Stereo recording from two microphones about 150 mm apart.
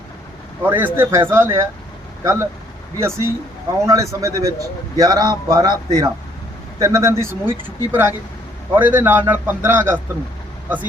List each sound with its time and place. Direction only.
0.6 s a man's voice: 10° right (ahead or behind)